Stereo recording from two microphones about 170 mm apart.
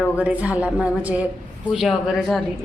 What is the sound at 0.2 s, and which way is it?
A woman's voice, 10° right (ahead or behind).